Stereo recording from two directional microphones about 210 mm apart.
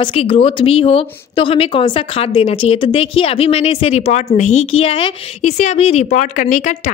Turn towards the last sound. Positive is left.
turn(degrees=35)  # may be behind; listen again after turning